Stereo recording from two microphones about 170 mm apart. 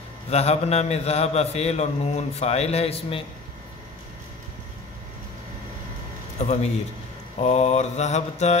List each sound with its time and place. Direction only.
0.3 s a man's voice: 40° left (ahead or behind)
6.4 s a man's voice: 40° left (ahead or behind)